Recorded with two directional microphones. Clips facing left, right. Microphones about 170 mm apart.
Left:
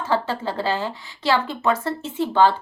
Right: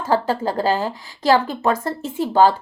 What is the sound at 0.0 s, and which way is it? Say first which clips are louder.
Speech: right 4 dB; 40° right (ahead or behind).